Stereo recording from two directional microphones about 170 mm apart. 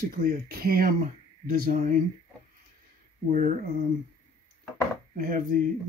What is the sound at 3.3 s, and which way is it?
Speech, 50° right (ahead or behind).